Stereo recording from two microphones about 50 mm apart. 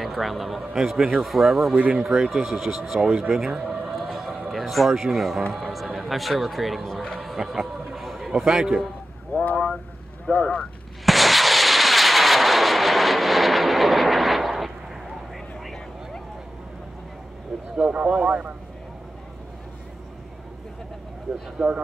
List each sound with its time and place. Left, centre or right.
0.0 s speech: centre
1.8 s speech: right
2.0 s speech: centre
3.0 s a man's voice: centre
3.3 s a sound: centre
5.5 s speech: centre
7.2 s a sound: centre
8.4 s a man's voice: centre
9.4 s speech: left
11.1 s artillery fire: centre
17.7 s speech: right
21.6 s speech: centre